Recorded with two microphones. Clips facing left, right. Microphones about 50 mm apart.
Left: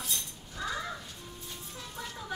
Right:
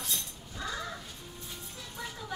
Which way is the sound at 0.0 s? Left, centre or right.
Centre.